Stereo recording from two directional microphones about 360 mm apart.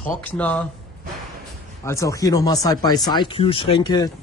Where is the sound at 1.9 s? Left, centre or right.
Centre.